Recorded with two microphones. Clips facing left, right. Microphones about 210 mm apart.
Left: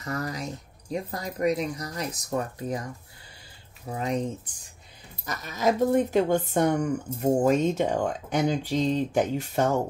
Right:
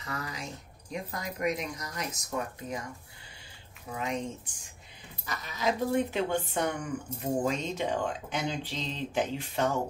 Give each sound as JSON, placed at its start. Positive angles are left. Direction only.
{"t": 0.0, "sound": "speech", "side_deg": 45}
{"t": 3.9, "sound": "speech", "side_deg": 35}